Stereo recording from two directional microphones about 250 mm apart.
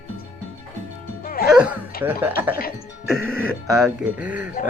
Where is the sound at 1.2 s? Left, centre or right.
Left.